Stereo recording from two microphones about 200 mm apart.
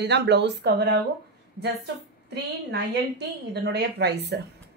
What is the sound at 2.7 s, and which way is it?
Speech, 60° right (ahead or behind).